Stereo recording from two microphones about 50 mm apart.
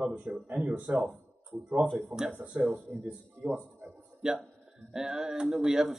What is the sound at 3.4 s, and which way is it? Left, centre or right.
Speech, right.